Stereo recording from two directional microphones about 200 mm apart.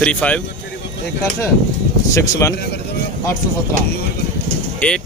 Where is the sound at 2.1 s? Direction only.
15° left (ahead or behind).